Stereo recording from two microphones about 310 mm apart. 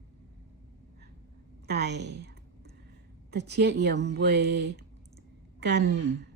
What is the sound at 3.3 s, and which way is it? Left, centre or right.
Speech, right.